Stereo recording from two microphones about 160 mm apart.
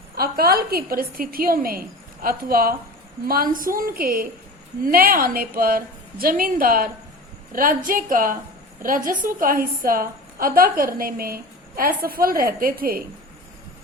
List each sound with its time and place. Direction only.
0.2 s a woman's voice: 70° right (ahead or behind)